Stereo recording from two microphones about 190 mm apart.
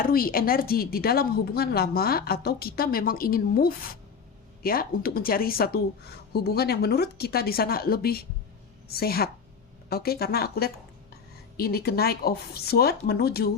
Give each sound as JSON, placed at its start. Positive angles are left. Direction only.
{"t": 0.0, "sound": "speech", "side_deg": 50}